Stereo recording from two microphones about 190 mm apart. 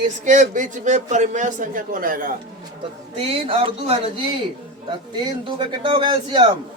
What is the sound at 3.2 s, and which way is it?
Speech, 30° right (ahead or behind).